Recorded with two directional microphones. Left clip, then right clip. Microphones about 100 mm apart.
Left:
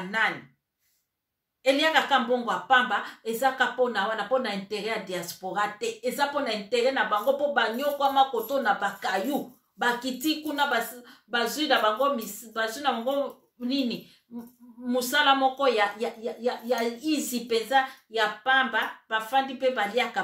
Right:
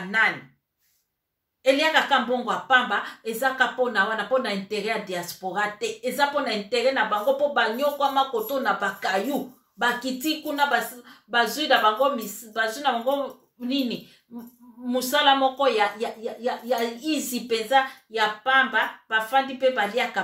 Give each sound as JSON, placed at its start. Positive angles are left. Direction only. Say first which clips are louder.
{"t": 1.6, "sound": "a woman's voice", "louder": "right 2 dB", "side_deg": 20}